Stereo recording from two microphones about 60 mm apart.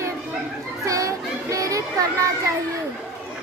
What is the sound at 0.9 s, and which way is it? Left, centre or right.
Music, right.